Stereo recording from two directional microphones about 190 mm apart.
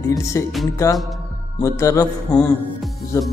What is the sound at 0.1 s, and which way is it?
Speech, 20° left (ahead or behind).